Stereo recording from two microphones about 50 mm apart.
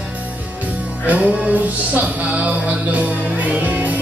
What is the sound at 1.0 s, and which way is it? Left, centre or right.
Music, right.